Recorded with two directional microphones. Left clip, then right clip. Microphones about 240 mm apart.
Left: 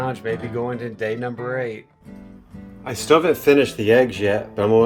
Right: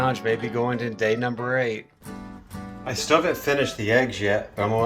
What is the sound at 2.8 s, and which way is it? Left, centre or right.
Speech, left.